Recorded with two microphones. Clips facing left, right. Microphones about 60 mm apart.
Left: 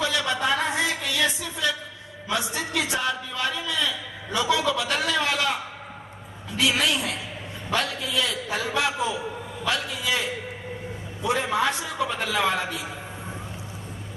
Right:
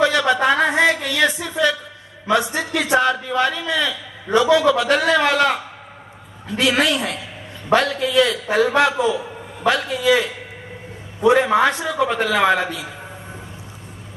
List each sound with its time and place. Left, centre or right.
0.0 s a sound: right
2.2 s a man's voice: right
6.6 s a man's voice: right